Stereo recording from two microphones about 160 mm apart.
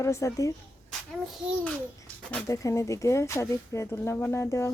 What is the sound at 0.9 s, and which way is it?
Speech, centre (ahead or behind).